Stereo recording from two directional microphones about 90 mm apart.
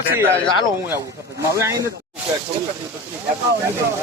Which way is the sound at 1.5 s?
35° right (ahead or behind).